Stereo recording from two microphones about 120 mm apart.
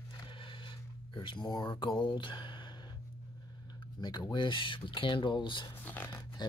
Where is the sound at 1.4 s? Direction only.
35° left (ahead or behind).